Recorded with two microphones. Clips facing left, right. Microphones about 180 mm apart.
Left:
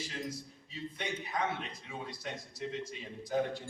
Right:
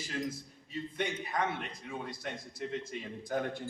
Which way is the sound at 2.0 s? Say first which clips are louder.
Right 1 dB; 50° right (ahead or behind).